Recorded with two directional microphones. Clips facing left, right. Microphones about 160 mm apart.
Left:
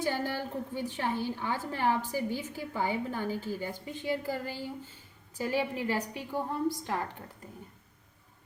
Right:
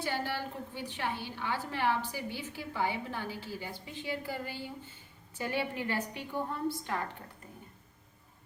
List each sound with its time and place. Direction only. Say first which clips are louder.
0.0 s a woman's voice: left 3 dB; 40° left (ahead or behind)